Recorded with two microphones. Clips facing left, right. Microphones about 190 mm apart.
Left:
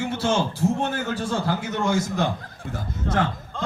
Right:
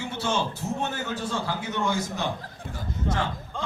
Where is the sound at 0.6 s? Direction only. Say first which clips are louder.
Left 6 dB; 55° left (ahead or behind).